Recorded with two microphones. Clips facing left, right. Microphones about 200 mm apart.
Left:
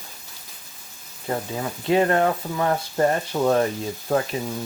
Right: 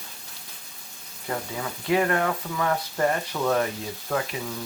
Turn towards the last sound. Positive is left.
turn(degrees=35)  # may be behind; listen again after turning